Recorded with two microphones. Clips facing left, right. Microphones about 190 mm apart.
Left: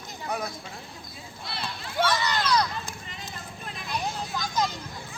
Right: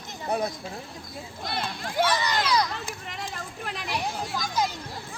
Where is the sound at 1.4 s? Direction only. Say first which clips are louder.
Right 4 dB; 50° right (ahead or behind).